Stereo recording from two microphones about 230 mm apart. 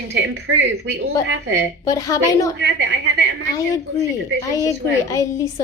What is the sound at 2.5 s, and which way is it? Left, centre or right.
Speech, right.